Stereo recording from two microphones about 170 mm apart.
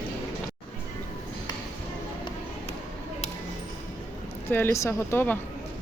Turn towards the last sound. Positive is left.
turn(degrees=15)  # may be behind; listen again after turning